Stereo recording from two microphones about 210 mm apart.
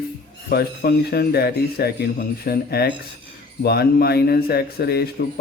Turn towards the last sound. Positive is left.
turn(degrees=50)  # may be behind; listen again after turning